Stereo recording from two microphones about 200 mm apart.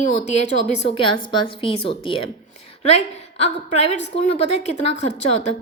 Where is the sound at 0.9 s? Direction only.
25° left (ahead or behind).